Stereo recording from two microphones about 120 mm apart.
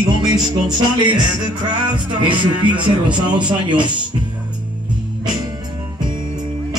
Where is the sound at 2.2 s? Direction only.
40° right (ahead or behind).